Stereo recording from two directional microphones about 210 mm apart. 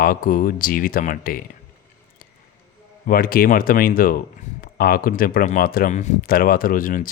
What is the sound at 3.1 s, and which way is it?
Speech, 45° left (ahead or behind).